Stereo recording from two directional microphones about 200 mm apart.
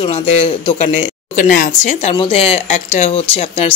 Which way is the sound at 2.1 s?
25° left (ahead or behind).